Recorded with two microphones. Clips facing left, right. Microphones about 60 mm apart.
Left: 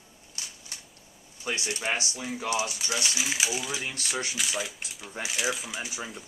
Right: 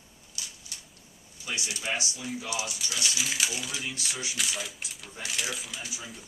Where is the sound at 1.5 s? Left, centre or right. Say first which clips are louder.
Left 3 dB; left.